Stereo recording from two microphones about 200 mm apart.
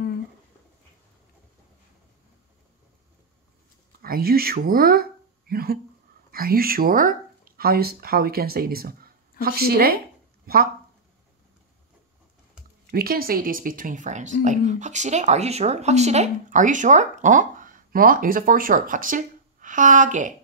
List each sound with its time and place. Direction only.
4.0 s speech: 50° right (ahead or behind)
12.9 s speech: 50° right (ahead or behind)